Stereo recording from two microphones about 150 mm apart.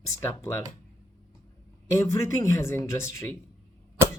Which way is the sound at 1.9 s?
20° left (ahead or behind).